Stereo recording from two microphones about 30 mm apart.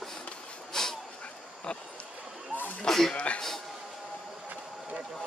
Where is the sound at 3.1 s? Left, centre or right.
Left.